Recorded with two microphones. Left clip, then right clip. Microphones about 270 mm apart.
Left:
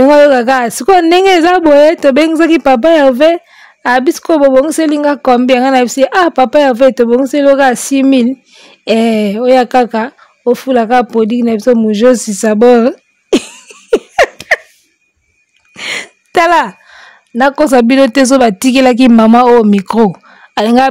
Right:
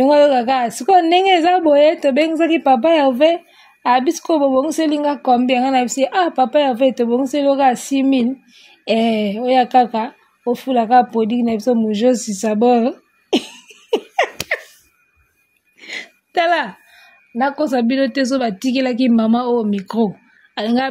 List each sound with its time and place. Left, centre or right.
0.0 s a woman's voice: left
15.7 s a woman's voice: left